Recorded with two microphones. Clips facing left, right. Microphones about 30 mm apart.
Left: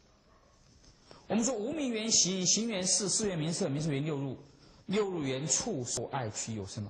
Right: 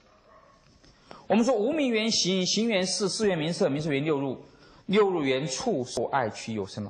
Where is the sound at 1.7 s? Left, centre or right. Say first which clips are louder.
Right 7 dB; right.